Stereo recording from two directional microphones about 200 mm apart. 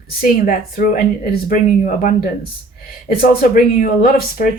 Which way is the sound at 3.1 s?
45° left (ahead or behind).